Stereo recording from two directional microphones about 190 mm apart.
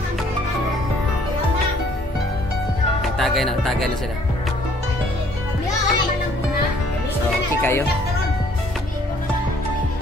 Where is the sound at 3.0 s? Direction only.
Centre (ahead or behind).